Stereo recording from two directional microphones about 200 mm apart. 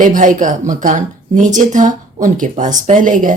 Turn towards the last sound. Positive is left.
turn(degrees=-40)  # may be behind; listen again after turning